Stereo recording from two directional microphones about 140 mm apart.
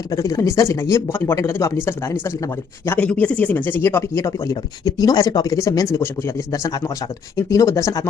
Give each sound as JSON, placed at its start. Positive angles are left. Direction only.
{"t": 0.1, "sound": "speech", "side_deg": 25}